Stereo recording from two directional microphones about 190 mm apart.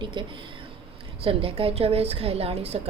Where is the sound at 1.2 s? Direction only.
30° right (ahead or behind).